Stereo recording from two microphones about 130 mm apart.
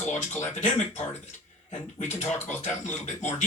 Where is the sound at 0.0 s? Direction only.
65° left (ahead or behind).